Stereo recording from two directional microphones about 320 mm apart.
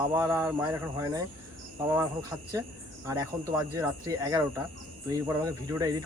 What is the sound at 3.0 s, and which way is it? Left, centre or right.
Speech, centre.